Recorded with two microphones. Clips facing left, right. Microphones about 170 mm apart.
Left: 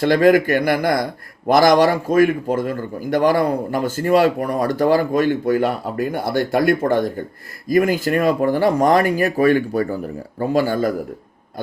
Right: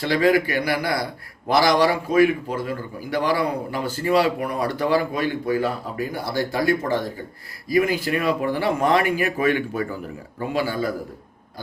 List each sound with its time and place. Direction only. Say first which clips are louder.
0.0 s speech: left 5 dB; 50° left (ahead or behind)